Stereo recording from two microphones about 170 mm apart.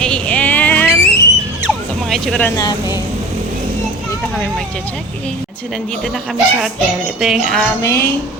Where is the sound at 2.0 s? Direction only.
Centre (ahead or behind).